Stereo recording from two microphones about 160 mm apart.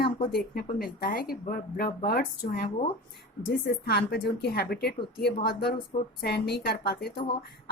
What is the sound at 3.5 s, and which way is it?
Speech, 85° left.